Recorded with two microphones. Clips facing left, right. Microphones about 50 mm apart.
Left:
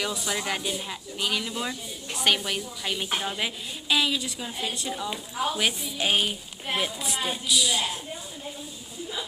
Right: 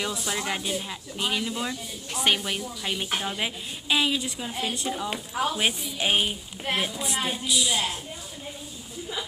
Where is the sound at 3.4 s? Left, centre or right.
Centre.